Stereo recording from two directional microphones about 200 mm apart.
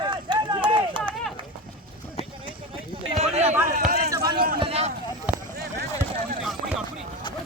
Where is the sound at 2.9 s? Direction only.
35° right (ahead or behind).